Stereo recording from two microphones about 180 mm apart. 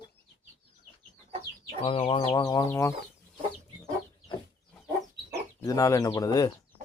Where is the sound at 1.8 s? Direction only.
30° left (ahead or behind); by 2.9 s 15° left (ahead or behind).